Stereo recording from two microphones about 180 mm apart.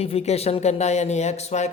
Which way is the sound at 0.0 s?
35° left (ahead or behind).